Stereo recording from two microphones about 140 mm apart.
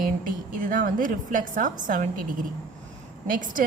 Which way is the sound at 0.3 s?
70° right (ahead or behind).